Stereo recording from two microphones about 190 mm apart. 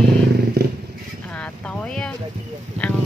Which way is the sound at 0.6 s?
60° right (ahead or behind).